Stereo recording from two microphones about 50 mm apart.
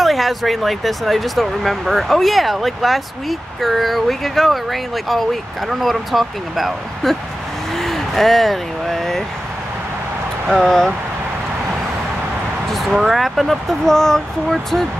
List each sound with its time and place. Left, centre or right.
0.0 s speech: centre
10.5 s speech: centre
12.9 s speech: centre